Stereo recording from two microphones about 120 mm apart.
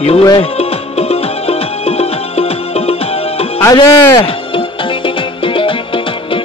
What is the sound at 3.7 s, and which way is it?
Music, 45° left (ahead or behind).